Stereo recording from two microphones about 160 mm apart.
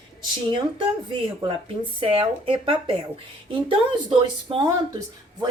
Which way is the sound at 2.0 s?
35° right (ahead or behind).